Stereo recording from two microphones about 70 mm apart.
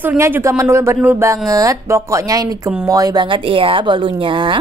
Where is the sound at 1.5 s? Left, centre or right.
Right.